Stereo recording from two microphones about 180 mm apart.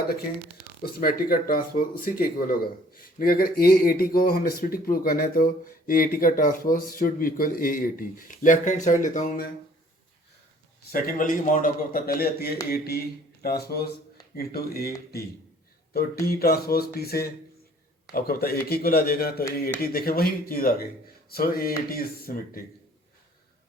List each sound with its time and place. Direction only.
0.8 s speech: 55° left (ahead or behind)
10.9 s a man's voice: 50° left (ahead or behind)
16.2 s a man's voice: 55° left (ahead or behind)